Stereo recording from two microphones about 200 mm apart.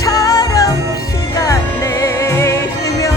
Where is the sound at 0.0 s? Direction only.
15° left (ahead or behind).